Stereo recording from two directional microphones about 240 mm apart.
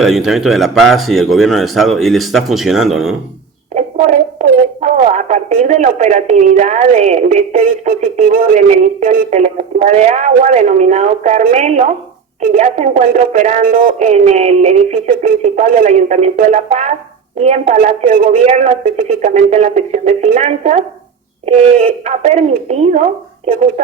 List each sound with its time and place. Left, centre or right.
0.0 s a man's voice: centre
4.4 s speech: right
7.9 s speech: right
22.0 s speech: right